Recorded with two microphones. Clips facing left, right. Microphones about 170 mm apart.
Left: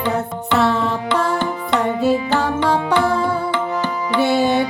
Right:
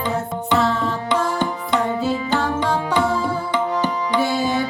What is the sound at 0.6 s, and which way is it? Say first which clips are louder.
Music: left 5 dB; 65° left (ahead or behind).